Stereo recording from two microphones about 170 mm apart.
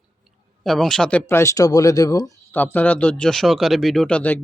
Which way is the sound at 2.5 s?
10° left (ahead or behind).